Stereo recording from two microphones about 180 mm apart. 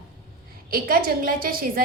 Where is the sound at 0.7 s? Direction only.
50° right (ahead or behind).